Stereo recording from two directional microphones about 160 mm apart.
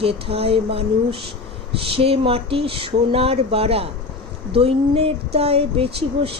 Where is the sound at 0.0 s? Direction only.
35° right (ahead or behind).